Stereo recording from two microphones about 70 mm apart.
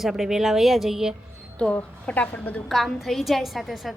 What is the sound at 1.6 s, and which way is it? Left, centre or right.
A woman's voice, centre.